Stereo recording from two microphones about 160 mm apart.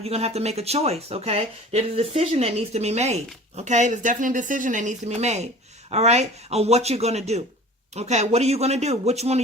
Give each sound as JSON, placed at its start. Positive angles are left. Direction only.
{"t": 0.0, "sound": "speech", "side_deg": -40}